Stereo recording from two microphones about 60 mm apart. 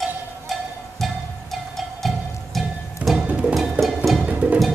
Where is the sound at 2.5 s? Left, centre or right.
Centre.